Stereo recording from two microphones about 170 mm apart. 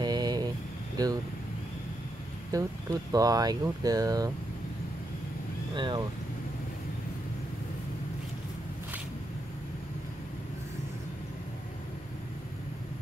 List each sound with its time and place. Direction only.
0.0 s vehicle: 25° right (ahead or behind)
1.0 s speech: 25° right (ahead or behind)
2.5 s speech: 20° right (ahead or behind)
5.8 s speech: 25° right (ahead or behind)